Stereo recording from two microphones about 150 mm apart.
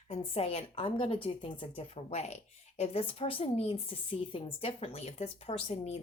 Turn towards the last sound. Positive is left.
turn(degrees=40)  # may be behind; listen again after turning